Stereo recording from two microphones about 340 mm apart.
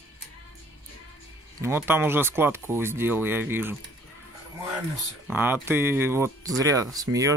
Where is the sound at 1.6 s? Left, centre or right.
Centre.